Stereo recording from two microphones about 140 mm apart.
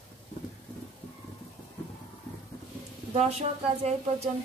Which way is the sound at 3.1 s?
50° right (ahead or behind).